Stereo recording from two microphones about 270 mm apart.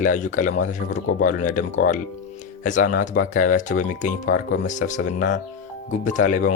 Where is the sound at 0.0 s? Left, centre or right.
Left.